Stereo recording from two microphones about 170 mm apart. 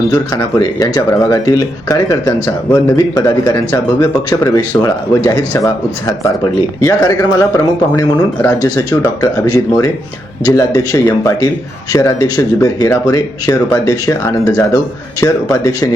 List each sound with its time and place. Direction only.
0.1 s a man's voice: 20° left (ahead or behind)